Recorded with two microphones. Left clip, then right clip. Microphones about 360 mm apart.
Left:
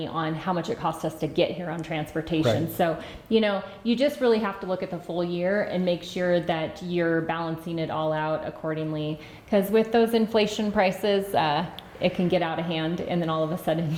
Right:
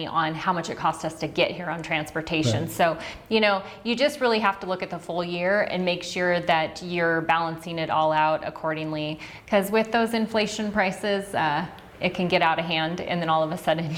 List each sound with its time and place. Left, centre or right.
0.0 s a woman's voice: right
12.0 s a woman's voice: right